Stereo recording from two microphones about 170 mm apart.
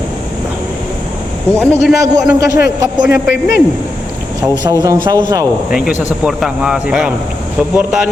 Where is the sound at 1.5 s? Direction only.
10° left (ahead or behind).